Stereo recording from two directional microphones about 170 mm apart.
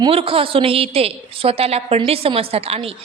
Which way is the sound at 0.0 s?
30° right (ahead or behind).